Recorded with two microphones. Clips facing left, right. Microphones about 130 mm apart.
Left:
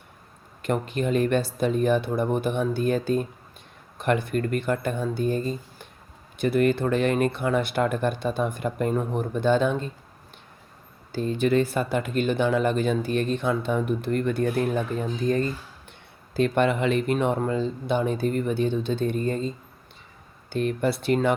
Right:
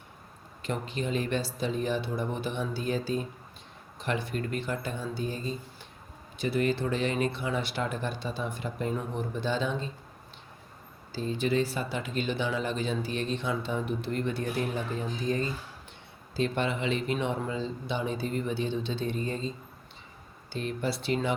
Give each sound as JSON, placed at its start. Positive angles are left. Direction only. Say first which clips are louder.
{"t": 0.6, "sound": "speech", "louder": "left 7 dB", "side_deg": 55}
{"t": 11.1, "sound": "speech", "louder": "left 6 dB", "side_deg": 55}